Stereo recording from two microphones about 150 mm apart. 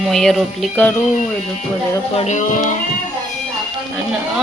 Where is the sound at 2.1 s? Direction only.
50° left (ahead or behind).